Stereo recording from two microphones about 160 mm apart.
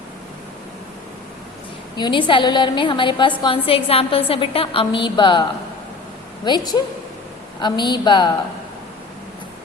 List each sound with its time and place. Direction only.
2.0 s a woman's voice: 30° left (ahead or behind)